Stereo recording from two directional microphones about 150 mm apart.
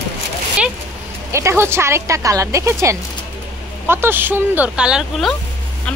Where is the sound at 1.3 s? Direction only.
20° right (ahead or behind); by 5.4 s centre (ahead or behind).